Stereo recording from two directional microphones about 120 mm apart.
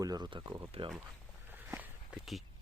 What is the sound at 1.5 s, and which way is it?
Walk, 15° right (ahead or behind).